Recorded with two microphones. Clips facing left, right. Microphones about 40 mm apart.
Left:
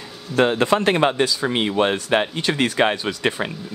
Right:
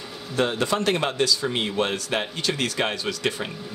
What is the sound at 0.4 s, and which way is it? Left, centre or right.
A man's voice, left.